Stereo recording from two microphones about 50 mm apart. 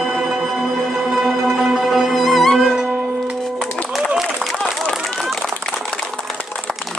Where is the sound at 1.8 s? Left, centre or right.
Centre.